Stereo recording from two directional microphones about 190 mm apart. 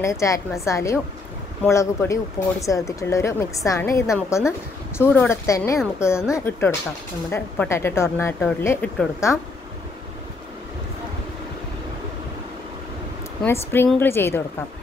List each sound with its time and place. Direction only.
0.0 s speech: 15° left (ahead or behind)
13.4 s speech: 10° left (ahead or behind)